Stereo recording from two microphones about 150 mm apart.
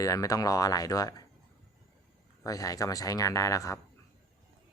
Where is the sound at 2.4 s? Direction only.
20° left (ahead or behind).